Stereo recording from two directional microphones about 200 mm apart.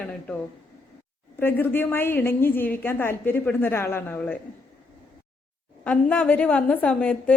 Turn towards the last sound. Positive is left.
turn(degrees=5)  # may be behind; listen again after turning